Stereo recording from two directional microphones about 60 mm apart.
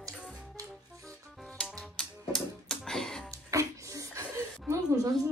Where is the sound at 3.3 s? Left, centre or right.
Right.